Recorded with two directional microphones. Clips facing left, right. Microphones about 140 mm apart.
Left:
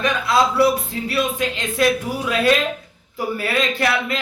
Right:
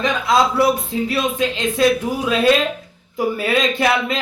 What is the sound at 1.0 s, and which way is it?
Speech, 25° right (ahead or behind).